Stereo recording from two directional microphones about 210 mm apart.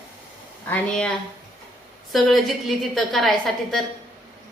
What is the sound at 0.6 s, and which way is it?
Speech, 10° left (ahead or behind).